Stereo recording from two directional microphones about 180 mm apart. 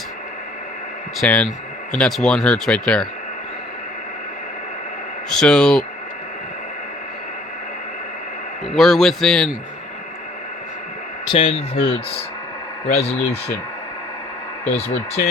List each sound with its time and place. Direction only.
1.2 s speech: 5° left (ahead or behind)
5.3 s speech: 5° left (ahead or behind)
8.6 s speech: centre (ahead or behind)
11.3 s speech: 30° left (ahead or behind)